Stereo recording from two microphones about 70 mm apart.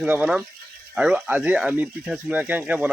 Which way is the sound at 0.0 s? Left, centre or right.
Right.